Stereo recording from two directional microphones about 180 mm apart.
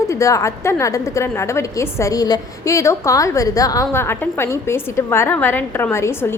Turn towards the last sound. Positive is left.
turn(degrees=15)  # may be behind; listen again after turning